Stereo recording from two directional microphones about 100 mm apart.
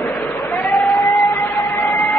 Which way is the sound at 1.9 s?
30° left (ahead or behind).